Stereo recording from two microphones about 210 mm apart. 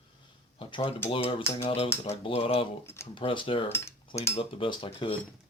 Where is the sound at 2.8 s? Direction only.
10° left (ahead or behind).